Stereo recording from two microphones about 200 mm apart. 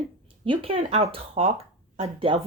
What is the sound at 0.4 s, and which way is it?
A woman's voice, 25° right (ahead or behind).